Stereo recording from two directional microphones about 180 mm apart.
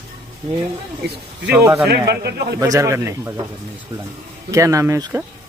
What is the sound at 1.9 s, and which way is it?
Speech, 65° right (ahead or behind).